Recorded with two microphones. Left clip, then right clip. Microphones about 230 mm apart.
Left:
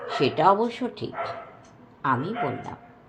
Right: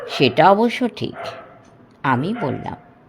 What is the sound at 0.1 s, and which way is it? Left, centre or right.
Speech, right.